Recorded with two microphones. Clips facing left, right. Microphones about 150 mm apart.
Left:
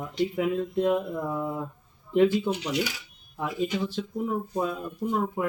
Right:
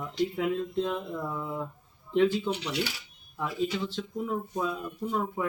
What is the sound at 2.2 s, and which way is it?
Speech, 15° left (ahead or behind).